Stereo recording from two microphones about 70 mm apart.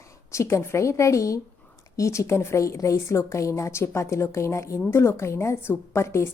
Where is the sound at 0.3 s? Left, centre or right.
Left.